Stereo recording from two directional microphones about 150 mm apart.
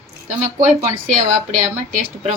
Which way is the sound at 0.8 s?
55° right (ahead or behind).